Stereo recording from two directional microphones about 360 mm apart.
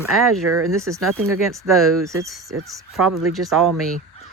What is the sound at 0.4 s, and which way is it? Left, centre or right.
Speech, right.